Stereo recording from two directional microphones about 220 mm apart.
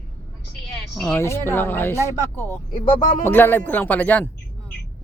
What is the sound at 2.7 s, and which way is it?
Speech, 25° left (ahead or behind).